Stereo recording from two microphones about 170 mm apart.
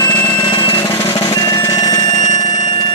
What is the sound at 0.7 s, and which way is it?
Percussion, 15° left (ahead or behind).